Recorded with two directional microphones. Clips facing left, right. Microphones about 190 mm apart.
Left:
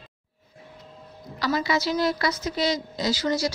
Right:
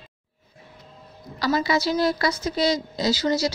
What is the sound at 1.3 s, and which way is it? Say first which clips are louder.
A woman's voice: right 2 dB; 35° right (ahead or behind).